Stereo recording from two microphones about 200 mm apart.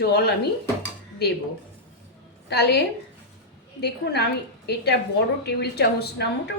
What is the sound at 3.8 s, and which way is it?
A woman's voice, 55° left (ahead or behind).